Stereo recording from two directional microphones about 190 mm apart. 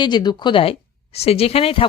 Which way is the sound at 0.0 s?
25° left (ahead or behind).